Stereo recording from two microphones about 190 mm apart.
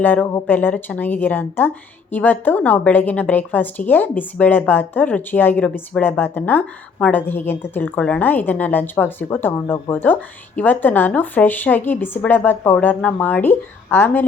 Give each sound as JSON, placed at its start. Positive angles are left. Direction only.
{"t": 0.0, "sound": "a woman's voice", "side_deg": 10}